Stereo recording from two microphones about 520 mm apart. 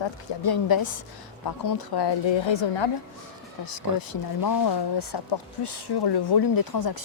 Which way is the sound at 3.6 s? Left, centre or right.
Left.